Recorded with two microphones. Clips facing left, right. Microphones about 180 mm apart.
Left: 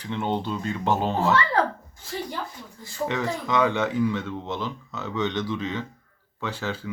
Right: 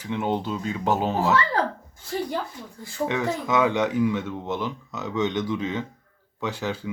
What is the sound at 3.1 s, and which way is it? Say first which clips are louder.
Speech: right 1 dB; 10° right (ahead or behind).